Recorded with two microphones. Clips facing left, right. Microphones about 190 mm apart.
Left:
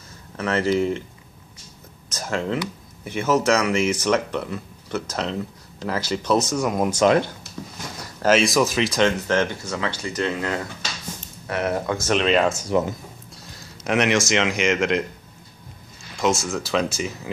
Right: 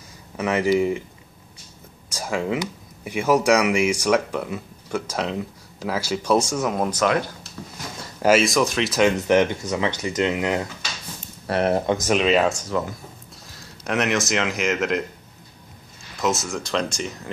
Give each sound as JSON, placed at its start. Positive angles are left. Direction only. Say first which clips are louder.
{"t": 0.4, "sound": "speech", "louder": "right 1 dB", "side_deg": -10}
{"t": 2.1, "sound": "speech", "louder": "right 1 dB", "side_deg": -10}
{"t": 7.0, "sound": "speech", "louder": "left 5 dB", "side_deg": 30}
{"t": 7.6, "sound": "speech", "louder": "left 2 dB", "side_deg": 10}
{"t": 8.2, "sound": "speech", "louder": "even", "side_deg": -5}
{"t": 9.3, "sound": "speech", "louder": "right 4 dB", "side_deg": -20}
{"t": 11.4, "sound": "speech", "louder": "right 4 dB", "side_deg": -30}
{"t": 12.1, "sound": "speech", "louder": "even", "side_deg": -5}
{"t": 13.6, "sound": "speech", "louder": "left 2 dB", "side_deg": 0}
{"t": 16.2, "sound": "speech", "louder": "left 2 dB", "side_deg": 0}